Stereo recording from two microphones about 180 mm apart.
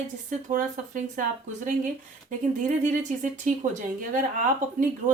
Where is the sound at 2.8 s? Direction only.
45° right (ahead or behind).